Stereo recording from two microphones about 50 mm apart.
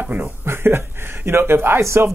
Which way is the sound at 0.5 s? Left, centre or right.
Right.